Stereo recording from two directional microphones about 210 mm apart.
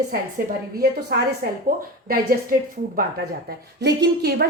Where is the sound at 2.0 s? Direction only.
45° right (ahead or behind).